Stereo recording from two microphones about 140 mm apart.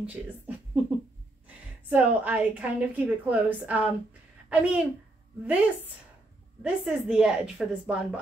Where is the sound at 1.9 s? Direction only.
10° right (ahead or behind).